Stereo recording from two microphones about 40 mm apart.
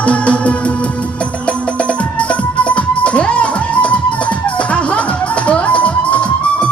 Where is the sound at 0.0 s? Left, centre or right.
Left.